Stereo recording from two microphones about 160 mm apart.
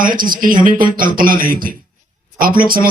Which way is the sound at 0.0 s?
60° right (ahead or behind).